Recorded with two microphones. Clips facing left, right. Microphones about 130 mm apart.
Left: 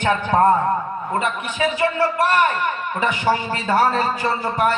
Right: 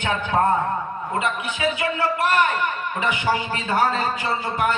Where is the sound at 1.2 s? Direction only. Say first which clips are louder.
Left 2 dB; 35° left (ahead or behind).